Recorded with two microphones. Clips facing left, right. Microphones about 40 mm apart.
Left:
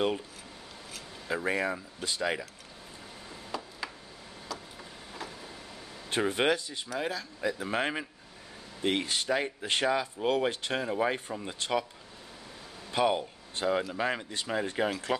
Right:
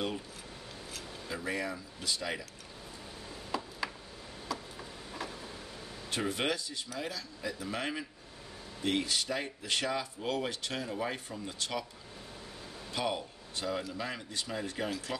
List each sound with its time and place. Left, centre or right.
1.3 s speech: left
3.5 s tick-tock: centre
4.5 s a sound: centre
6.0 s speech: left
12.9 s speech: left